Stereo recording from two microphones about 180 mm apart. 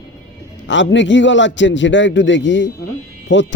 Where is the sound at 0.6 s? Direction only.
90° left.